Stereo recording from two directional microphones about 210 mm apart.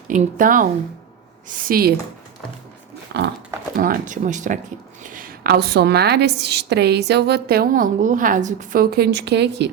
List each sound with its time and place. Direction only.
0.1 s a woman's voice: 40° right (ahead or behind)
3.1 s a sound: 55° right (ahead or behind)
3.8 s a woman's voice: 40° right (ahead or behind)